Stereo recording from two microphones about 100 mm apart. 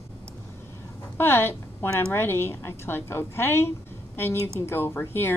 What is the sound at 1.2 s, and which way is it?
Speech, 25° left (ahead or behind).